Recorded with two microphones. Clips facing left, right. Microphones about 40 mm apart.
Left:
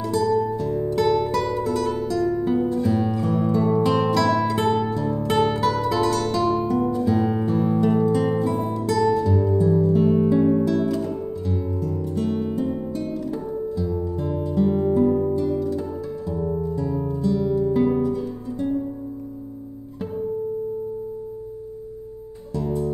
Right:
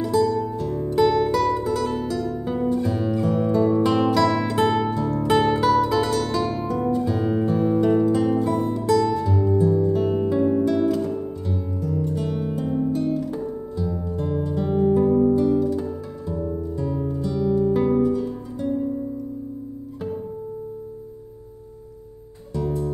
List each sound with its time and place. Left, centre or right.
0.0 s music: centre
15.1 s guitar: centre
16.3 s music: centre